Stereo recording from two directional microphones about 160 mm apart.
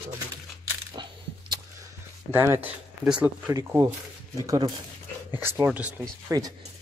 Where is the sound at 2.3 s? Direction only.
15° right (ahead or behind).